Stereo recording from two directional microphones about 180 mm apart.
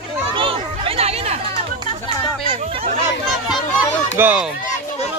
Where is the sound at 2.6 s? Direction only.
35° right (ahead or behind).